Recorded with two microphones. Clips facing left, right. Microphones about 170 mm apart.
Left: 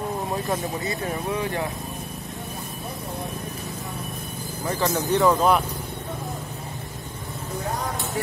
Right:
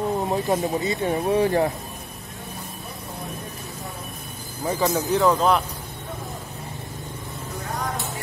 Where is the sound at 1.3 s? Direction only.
40° right (ahead or behind).